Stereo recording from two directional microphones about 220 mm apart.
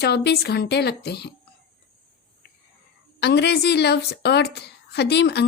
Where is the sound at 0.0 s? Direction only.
50° left (ahead or behind).